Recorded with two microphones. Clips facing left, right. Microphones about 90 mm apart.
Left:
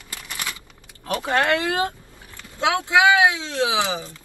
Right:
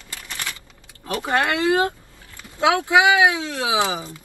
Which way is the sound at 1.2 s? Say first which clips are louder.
Left 1 dB; 20° right (ahead or behind).